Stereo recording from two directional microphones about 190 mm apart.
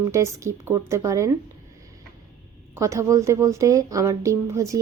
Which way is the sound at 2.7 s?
15° right (ahead or behind).